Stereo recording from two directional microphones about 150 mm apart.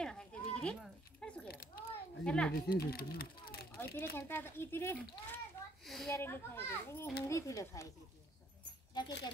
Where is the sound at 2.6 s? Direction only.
85° left.